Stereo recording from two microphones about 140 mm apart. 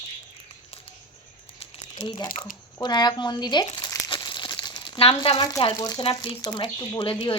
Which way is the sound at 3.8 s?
30° left (ahead or behind).